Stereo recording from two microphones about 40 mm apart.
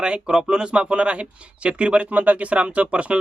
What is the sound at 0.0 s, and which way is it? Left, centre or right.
Speech, centre.